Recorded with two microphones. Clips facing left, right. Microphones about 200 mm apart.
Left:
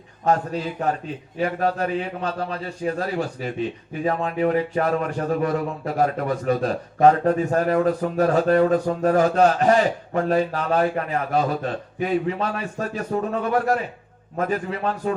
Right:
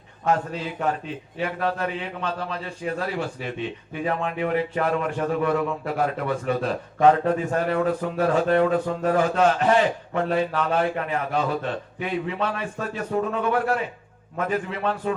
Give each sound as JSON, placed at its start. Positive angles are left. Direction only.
{"t": 0.3, "sound": "a man's voice", "side_deg": 40}